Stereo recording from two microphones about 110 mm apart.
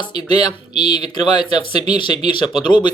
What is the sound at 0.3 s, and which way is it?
Speech, 40° left (ahead or behind).